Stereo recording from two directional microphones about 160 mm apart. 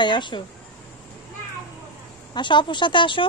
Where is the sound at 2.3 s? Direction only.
30° left (ahead or behind).